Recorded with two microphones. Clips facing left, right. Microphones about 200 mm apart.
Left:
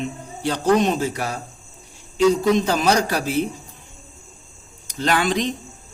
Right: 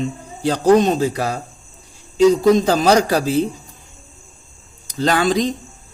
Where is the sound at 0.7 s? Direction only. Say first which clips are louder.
Right 5 dB; 35° right (ahead or behind).